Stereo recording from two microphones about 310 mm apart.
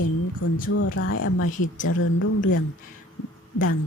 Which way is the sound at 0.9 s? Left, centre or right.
Left.